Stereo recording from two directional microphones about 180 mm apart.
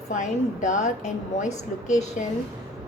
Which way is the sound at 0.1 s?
40° left (ahead or behind).